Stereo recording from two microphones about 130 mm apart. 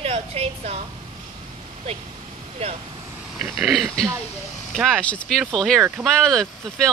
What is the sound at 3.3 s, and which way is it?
Speech, 5° right (ahead or behind).